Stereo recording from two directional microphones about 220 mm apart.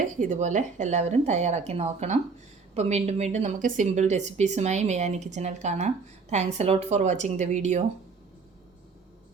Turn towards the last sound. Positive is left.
turn(degrees=-30)  # may be behind; listen again after turning